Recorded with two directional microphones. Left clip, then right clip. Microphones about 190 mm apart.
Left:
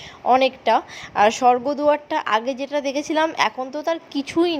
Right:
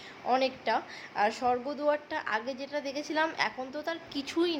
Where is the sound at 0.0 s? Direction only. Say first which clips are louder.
Left 11 dB; 35° left (ahead or behind).